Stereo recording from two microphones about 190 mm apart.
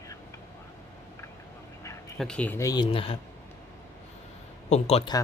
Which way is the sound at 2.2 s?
5° left (ahead or behind).